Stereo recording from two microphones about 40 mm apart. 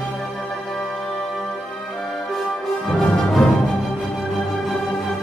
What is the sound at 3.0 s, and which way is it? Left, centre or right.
Music, centre.